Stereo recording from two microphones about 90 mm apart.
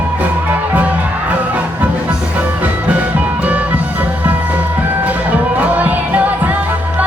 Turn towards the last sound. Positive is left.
turn(degrees=-20)  # may be behind; listen again after turning